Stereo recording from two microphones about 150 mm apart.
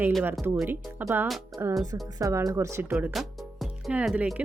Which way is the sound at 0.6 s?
15° right (ahead or behind).